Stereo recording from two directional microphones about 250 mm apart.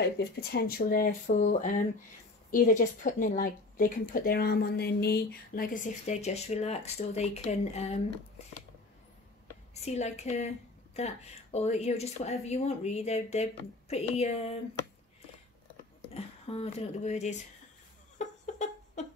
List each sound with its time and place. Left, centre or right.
0.2 s a woman's voice: left
9.8 s speech: left
16.1 s speech: left
18.1 s a sound: left